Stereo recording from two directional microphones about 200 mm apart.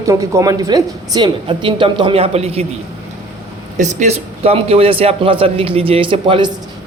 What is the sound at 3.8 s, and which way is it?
Speech, 35° right (ahead or behind).